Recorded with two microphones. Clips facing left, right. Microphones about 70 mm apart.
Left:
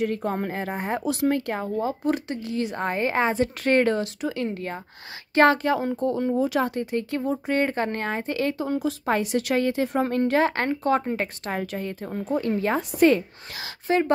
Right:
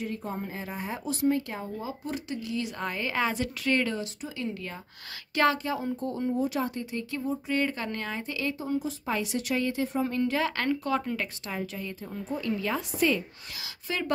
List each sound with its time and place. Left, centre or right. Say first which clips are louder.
0.0 s speech: left 8 dB; left
1.0 s speech: left 2 dB; left
4.0 s speech: left 7 dB; left
5.7 s speech: left 7 dB; left
8.5 s speech: left 5 dB; left
9.1 s speech: left 6 dB; left
11.4 s speech: left 6 dB; left
12.3 s speech: left 6 dB; left